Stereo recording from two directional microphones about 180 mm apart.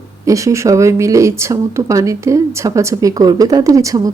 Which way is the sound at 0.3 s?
15° right (ahead or behind).